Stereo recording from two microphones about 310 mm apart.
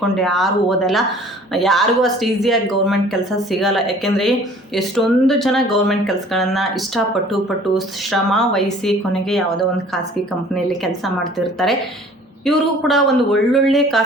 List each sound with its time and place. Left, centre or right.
0.0 s speech: centre
10.5 s speech: centre